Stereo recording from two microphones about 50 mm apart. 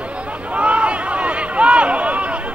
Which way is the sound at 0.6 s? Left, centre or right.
Right.